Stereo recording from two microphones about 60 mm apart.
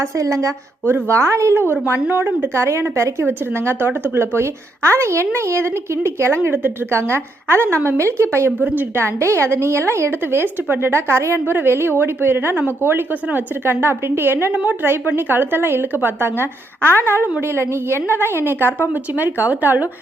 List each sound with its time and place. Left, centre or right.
0.0 s a woman's voice: right
1.0 s speech: right
2.0 s a woman's voice: right
2.6 s speech: right
8.6 s a woman's voice: right
9.0 s a woman's voice: right
19.1 s a woman's voice: right